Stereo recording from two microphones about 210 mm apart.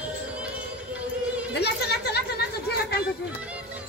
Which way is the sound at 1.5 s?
50° left (ahead or behind).